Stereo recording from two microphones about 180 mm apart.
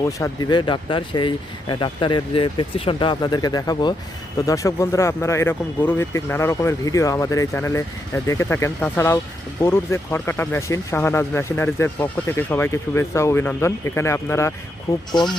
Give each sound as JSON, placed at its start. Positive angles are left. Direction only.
{"t": 0.0, "sound": "speech", "side_deg": 20}